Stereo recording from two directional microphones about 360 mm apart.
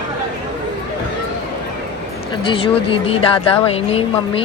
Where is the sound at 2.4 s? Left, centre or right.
Centre.